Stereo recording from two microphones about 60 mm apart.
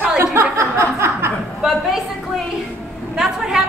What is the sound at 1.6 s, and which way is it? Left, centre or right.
A woman's voice, centre.